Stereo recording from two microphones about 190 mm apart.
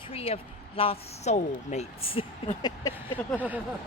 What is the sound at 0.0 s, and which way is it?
A woman's voice, 30° left (ahead or behind).